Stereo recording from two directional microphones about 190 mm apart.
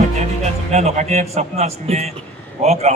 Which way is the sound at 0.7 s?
35° right (ahead or behind).